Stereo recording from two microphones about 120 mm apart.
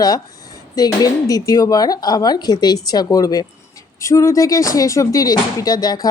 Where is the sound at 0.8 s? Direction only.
30° left (ahead or behind).